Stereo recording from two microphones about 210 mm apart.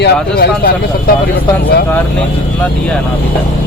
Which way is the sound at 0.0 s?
50° left (ahead or behind).